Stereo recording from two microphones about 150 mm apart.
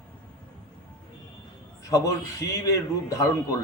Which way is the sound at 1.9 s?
20° left (ahead or behind).